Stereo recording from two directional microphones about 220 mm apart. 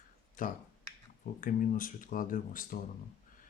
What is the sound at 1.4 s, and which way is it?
Speech, 40° left (ahead or behind).